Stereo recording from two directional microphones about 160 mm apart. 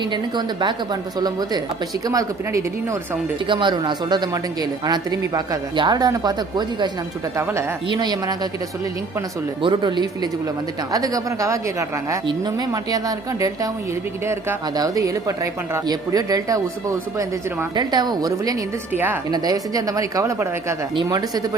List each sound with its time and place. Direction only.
0.0 s speech: 30° right (ahead or behind)
9.6 s speech: 30° right (ahead or behind)
14.8 s speech: 20° right (ahead or behind)
17.7 s speech: 25° right (ahead or behind)